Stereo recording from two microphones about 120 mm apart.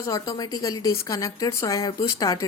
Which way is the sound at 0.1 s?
30° left (ahead or behind).